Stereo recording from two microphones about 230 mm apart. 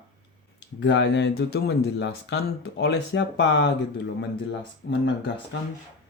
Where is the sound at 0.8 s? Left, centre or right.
Left.